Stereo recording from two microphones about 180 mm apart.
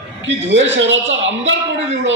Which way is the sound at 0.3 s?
90° right.